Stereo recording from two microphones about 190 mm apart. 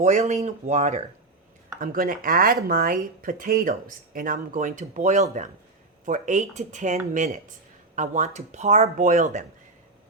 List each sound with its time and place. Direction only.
0.0 s speech: 35° right (ahead or behind)